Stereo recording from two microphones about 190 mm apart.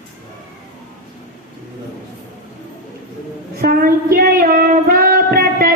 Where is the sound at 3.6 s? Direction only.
50° right (ahead or behind).